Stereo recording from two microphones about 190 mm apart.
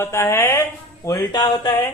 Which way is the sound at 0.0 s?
15° left (ahead or behind).